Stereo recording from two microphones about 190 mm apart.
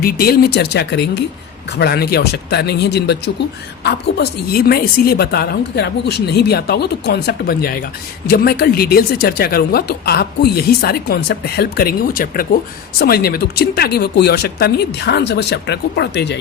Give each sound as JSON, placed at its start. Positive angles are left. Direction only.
{"t": 0.0, "sound": "a woman's voice", "side_deg": 55}